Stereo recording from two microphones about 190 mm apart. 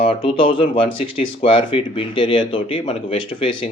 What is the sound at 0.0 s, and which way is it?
Speech, 30° left (ahead or behind).